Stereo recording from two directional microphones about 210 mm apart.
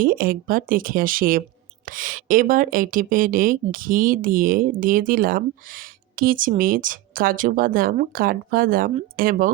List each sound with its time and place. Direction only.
0.0 s speech: 40° right (ahead or behind)